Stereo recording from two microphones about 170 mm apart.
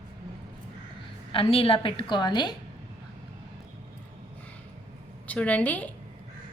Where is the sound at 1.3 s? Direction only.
35° left (ahead or behind).